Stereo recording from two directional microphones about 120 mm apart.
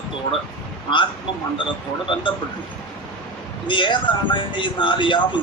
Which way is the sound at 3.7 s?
40° left (ahead or behind).